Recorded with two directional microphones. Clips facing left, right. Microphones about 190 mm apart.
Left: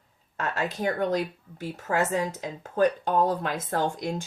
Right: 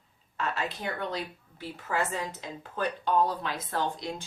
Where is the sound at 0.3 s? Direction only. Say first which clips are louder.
Left 3 dB; 45° left (ahead or behind).